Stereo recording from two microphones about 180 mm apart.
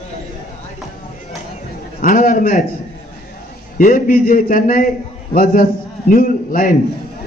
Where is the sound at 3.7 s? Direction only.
50° left (ahead or behind).